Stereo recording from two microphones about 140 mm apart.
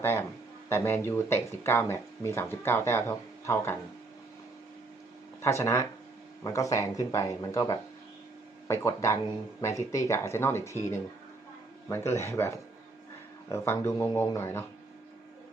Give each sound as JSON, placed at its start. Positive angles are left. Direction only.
{"t": 0.0, "sound": "speech", "side_deg": 15}
{"t": 5.4, "sound": "speech", "side_deg": 20}